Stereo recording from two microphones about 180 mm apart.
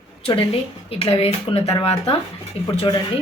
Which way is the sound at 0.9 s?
30° left (ahead or behind).